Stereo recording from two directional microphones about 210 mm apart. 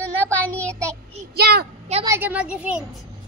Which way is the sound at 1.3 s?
50° right (ahead or behind).